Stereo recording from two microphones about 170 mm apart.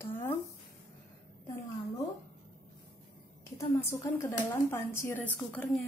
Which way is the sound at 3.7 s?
15° left (ahead or behind).